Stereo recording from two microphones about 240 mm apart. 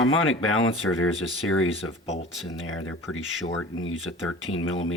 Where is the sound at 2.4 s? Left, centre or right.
Left.